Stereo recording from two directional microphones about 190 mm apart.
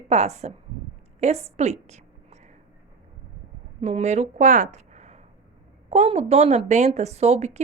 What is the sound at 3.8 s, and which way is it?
A woman's voice, 35° right (ahead or behind).